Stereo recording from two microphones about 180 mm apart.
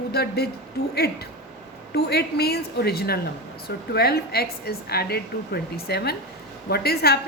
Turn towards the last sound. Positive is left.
turn(degrees=60)  # may be behind; listen again after turning